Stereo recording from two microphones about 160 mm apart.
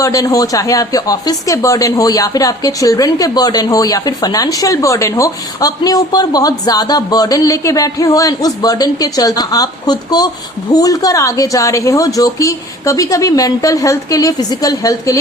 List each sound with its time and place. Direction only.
0.0 s speech: 20° left (ahead or behind)